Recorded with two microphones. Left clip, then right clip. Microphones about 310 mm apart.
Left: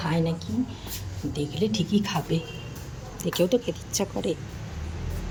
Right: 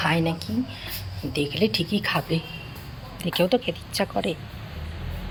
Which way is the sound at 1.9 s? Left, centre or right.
Centre.